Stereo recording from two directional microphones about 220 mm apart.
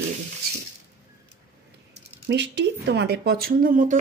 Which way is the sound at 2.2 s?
50° right (ahead or behind).